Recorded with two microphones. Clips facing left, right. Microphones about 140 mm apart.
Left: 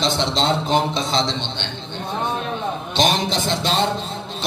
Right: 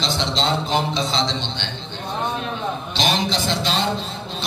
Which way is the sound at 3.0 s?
50° left (ahead or behind).